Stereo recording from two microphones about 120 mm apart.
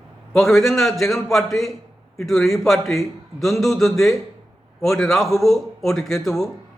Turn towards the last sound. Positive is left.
turn(degrees=0)  # may be behind; listen again after turning